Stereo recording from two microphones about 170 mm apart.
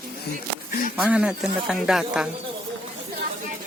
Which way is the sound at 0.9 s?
5° right (ahead or behind).